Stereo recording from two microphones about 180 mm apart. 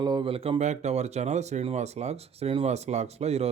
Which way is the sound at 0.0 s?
25° right (ahead or behind).